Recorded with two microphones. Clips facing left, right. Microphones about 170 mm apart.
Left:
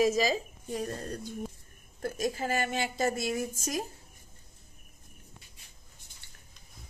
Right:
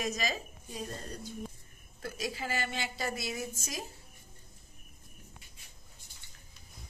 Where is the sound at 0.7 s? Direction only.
55° left (ahead or behind).